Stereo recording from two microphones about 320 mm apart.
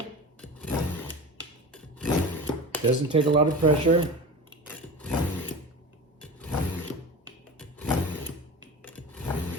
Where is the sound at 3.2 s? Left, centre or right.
Centre.